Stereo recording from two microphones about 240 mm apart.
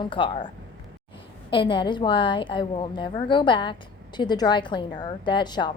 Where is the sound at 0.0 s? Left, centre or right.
Left.